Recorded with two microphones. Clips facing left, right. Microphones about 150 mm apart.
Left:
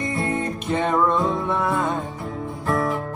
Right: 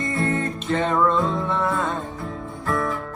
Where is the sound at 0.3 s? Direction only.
15° left (ahead or behind).